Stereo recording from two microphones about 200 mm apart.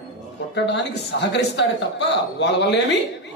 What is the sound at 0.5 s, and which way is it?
A man's voice, 60° left (ahead or behind).